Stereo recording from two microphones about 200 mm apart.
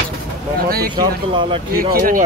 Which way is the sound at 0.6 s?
50° right (ahead or behind).